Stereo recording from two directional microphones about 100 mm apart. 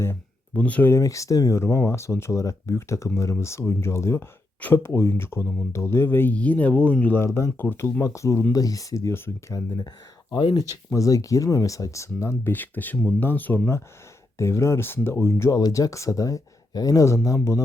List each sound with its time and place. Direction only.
0.0 s speech: 20° left (ahead or behind)
0.9 s speech: 30° left (ahead or behind)